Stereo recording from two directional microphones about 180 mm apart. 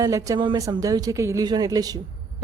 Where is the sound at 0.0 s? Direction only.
20° right (ahead or behind).